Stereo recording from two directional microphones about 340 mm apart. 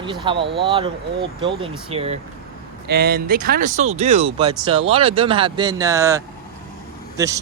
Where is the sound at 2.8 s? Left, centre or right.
Right.